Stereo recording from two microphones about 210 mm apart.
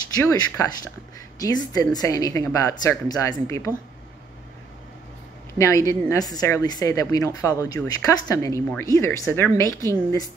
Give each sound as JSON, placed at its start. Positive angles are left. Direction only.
{"t": 0.2, "sound": "a woman's voice", "side_deg": 15}
{"t": 5.6, "sound": "a woman's voice", "side_deg": 15}